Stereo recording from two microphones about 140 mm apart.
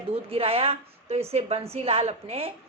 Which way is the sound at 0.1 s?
40° right (ahead or behind).